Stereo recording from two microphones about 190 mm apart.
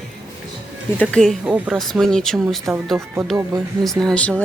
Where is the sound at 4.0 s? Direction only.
5° left (ahead or behind).